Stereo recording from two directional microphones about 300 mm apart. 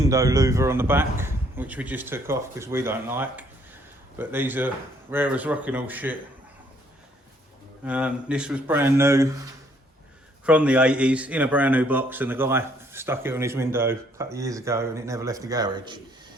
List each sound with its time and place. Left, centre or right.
0.0 s a man's voice: centre
7.9 s speech: centre
10.4 s a man's voice: centre